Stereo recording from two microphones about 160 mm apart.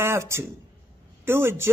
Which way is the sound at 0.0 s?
15° right (ahead or behind).